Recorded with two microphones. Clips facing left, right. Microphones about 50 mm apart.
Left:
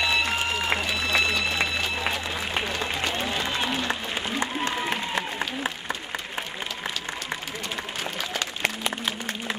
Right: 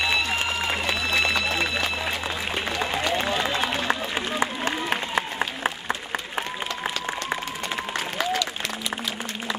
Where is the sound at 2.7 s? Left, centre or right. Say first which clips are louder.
Right 2 dB; right.